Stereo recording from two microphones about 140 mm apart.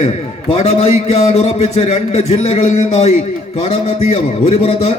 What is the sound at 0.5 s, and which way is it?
A man's voice, 45° left (ahead or behind).